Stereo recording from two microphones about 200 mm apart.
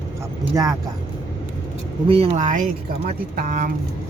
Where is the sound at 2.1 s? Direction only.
30° right (ahead or behind).